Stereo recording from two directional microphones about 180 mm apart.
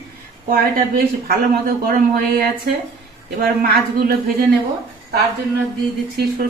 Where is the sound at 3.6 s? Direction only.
55° right (ahead or behind).